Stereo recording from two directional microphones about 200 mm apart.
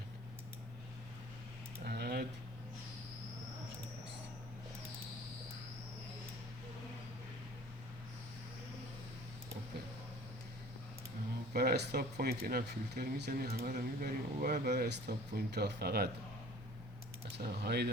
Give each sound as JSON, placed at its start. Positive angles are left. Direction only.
{"t": 1.8, "sound": "typing", "side_deg": -55}
{"t": 11.5, "sound": "speech", "side_deg": -50}
{"t": 17.2, "sound": "speech", "side_deg": -55}